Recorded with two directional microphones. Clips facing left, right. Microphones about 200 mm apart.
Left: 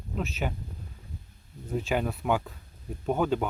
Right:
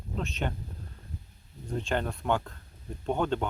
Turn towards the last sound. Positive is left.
turn(degrees=5)  # may be behind; listen again after turning